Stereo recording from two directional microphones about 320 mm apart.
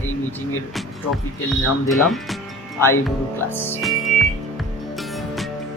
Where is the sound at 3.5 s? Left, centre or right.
Centre.